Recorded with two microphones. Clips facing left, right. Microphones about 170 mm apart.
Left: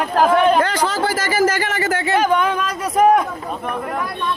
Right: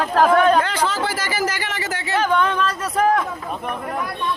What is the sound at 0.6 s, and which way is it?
A man's voice, 40° left (ahead or behind).